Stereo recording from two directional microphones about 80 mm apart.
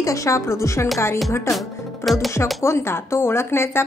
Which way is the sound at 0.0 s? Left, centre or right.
Left.